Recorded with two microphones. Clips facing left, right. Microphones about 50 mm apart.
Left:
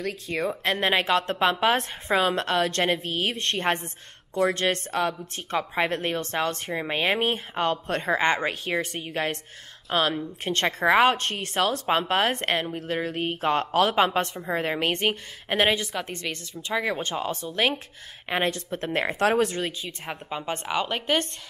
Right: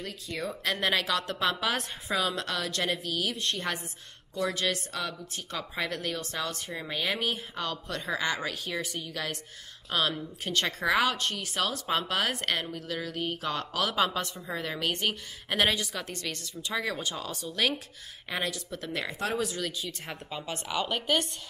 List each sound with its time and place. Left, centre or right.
0.0 s speech: left
0.4 s a woman's voice: left
19.1 s speech: left
19.6 s a woman's voice: left